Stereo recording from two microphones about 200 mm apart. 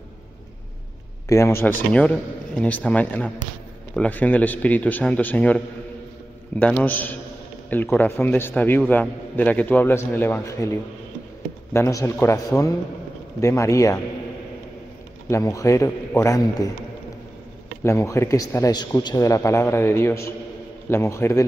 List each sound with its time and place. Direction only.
1.3 s a man's voice: 15° left (ahead or behind)
6.8 s a man's voice: 10° left (ahead or behind)
15.2 s a man's voice: 15° left (ahead or behind)
17.8 s a man's voice: 15° left (ahead or behind)